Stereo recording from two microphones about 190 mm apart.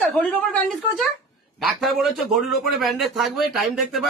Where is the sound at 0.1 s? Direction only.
5° left (ahead or behind).